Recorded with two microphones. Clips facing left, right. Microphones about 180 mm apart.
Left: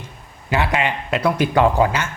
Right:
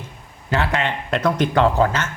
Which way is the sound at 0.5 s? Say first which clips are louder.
Left 1 dB; 10° left (ahead or behind).